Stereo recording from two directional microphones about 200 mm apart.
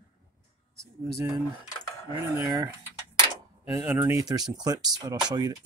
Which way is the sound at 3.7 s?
10° right (ahead or behind).